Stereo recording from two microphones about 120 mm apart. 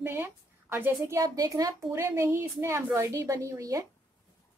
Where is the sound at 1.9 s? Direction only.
20° right (ahead or behind).